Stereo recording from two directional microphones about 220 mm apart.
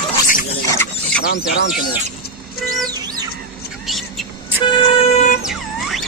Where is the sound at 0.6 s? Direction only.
10° left (ahead or behind).